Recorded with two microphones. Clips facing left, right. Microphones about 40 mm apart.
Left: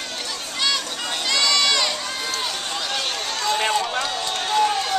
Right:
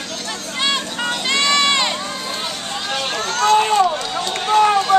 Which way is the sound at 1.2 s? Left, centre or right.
Right.